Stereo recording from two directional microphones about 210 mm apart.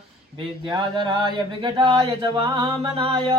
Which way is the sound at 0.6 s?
20° right (ahead or behind).